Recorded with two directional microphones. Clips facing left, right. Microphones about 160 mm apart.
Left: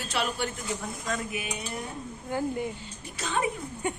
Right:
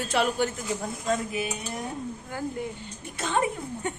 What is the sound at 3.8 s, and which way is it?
Speech, 10° left (ahead or behind).